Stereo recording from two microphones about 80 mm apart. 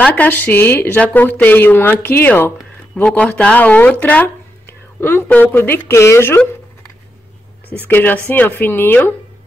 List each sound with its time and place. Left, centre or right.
0.0 s speech: left
3.0 s speech: centre; by 6.4 s left
7.7 s speech: left